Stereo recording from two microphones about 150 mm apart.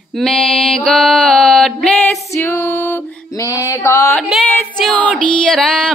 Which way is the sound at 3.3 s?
20° left (ahead or behind).